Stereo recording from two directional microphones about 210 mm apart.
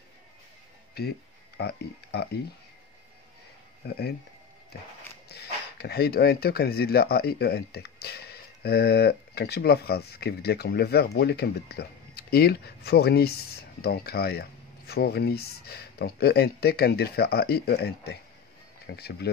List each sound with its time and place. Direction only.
1.0 s speech: 50° left (ahead or behind)
3.8 s speech: 50° left (ahead or behind)
5.3 s speech: 50° left (ahead or behind)